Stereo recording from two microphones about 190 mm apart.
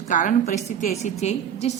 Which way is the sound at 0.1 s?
40° left (ahead or behind).